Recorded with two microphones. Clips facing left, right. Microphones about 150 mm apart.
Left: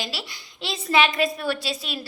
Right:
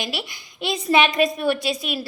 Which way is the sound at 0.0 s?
15° right (ahead or behind).